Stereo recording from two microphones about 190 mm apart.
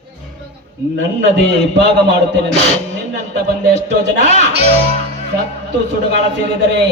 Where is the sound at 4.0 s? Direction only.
65° right (ahead or behind).